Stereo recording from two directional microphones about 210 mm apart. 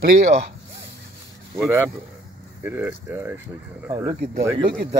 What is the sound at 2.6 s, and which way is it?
Speech, 5° right (ahead or behind).